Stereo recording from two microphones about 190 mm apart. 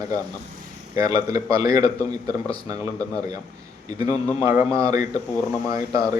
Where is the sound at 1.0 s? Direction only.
20° right (ahead or behind).